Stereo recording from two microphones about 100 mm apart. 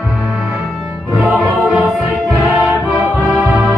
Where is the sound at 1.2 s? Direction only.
15° right (ahead or behind).